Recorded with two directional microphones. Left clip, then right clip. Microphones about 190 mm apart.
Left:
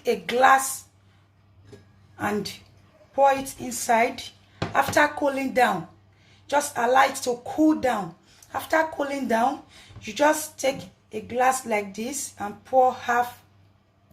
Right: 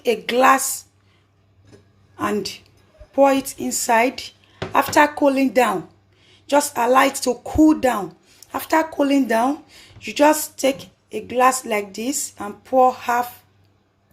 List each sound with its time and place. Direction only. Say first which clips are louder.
0.0 s a woman's voice: right 4 dB; 35° right (ahead or behind)
2.1 s a woman's voice: right 4 dB; 35° right (ahead or behind)